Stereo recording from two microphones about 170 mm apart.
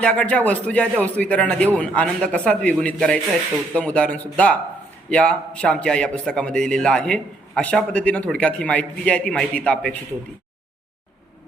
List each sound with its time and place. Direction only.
0.0 s a man's voice: 5° left (ahead or behind)